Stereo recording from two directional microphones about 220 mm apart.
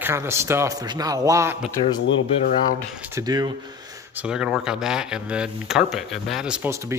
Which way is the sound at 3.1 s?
20° right (ahead or behind).